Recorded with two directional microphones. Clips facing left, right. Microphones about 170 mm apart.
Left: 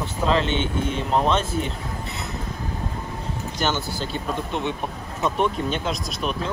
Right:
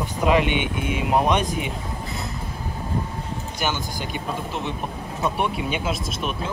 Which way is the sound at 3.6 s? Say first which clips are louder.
Left 2 dB; 10° right (ahead or behind).